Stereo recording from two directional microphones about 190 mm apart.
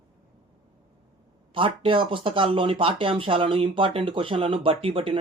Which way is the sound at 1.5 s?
30° right (ahead or behind).